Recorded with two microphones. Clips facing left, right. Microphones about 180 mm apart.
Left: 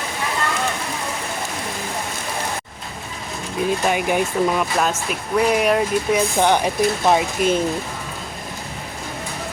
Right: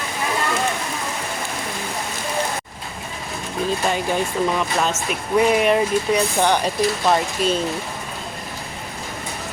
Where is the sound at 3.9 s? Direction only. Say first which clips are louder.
Left 2 dB; 10° left (ahead or behind).